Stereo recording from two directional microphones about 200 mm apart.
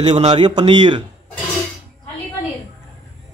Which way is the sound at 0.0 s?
30° right (ahead or behind).